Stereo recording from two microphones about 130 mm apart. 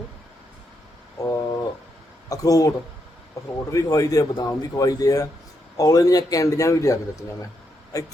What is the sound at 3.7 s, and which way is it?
Speech, 25° left (ahead or behind).